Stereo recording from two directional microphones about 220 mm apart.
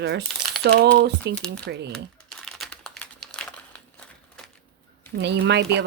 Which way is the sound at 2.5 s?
Centre (ahead or behind).